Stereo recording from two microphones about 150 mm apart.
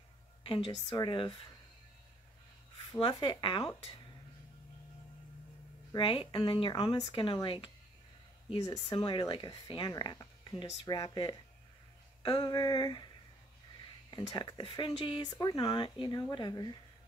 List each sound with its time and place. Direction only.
0.8 s speech: 25° left (ahead or behind)
2.9 s speech: 35° left (ahead or behind)
5.9 s speech: 35° left (ahead or behind)
14.1 s speech: 30° left (ahead or behind)